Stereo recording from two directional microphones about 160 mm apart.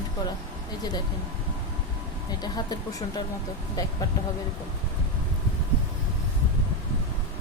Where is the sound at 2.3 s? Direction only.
25° left (ahead or behind).